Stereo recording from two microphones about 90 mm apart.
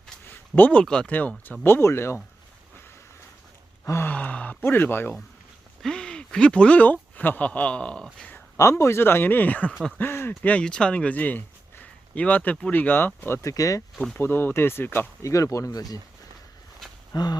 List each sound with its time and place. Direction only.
0.3 s speech: 20° left (ahead or behind)
1.6 s speech: 30° left (ahead or behind)
3.8 s speech: 30° left (ahead or behind)
4.1 s speech: 15° left (ahead or behind)
5.8 s speech: 10° left (ahead or behind)
8.5 s speech: 30° left (ahead or behind)
14.2 s speech: 25° left (ahead or behind)
15.2 s speech: 35° left (ahead or behind)
17.1 s a sound: 50° left (ahead or behind)